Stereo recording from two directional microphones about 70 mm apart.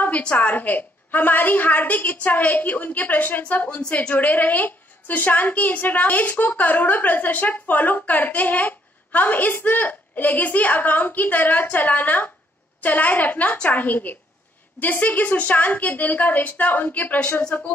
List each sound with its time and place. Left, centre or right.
0.0 s a woman's voice: left
17.4 s speech: centre